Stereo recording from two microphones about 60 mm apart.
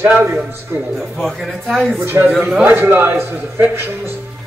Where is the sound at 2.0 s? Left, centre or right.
Right.